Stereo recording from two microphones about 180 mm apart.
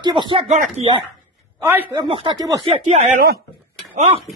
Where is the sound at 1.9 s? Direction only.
25° right (ahead or behind).